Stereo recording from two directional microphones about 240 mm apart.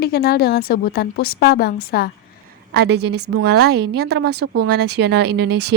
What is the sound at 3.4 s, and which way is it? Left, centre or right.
A woman's voice, right.